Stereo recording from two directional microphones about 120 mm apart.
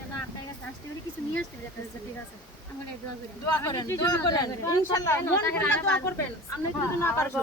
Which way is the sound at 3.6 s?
25° left (ahead or behind).